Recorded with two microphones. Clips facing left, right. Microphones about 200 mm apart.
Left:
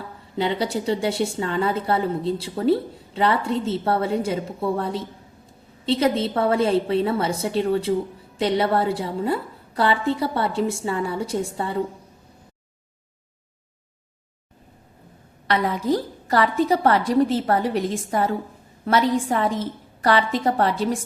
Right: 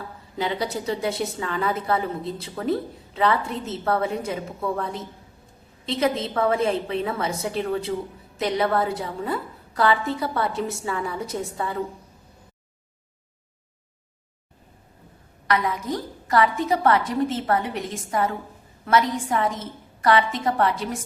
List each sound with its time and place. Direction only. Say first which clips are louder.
0.3 s a woman's voice: left 3 dB; 25° left (ahead or behind)
15.4 s a woman's voice: left 3 dB; 30° left (ahead or behind)